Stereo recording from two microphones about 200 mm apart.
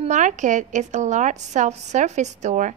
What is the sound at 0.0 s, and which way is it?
A woman's voice, 35° right (ahead or behind).